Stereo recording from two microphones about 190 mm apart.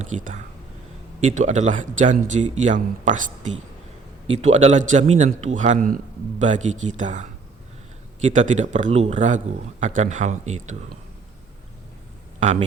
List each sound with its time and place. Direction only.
0.0 s a man's voice: 40° right (ahead or behind)
12.4 s speech: 35° right (ahead or behind)